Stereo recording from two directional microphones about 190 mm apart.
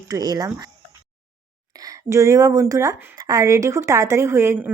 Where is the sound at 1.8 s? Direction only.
15° right (ahead or behind).